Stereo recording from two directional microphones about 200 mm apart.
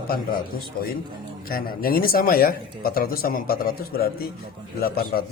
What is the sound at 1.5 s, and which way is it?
Speech, 45° left (ahead or behind).